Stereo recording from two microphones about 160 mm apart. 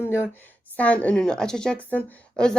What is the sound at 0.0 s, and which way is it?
A woman's voice, 15° left (ahead or behind).